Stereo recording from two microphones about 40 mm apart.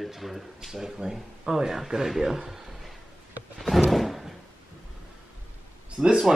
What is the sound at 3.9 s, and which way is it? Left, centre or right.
Door, centre.